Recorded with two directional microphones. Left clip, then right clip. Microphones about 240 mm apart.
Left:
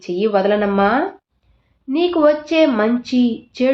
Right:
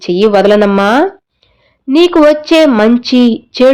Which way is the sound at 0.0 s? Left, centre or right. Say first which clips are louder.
Right 9 dB; right.